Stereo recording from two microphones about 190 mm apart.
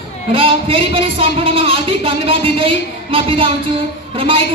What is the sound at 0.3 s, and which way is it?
A man's voice, 30° right (ahead or behind).